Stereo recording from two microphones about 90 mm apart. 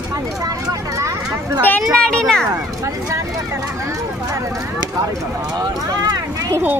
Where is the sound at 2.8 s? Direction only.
30° right (ahead or behind).